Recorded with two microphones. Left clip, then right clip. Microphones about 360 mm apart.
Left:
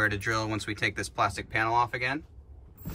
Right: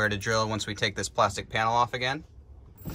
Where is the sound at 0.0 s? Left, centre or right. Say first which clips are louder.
Right 1 dB; centre.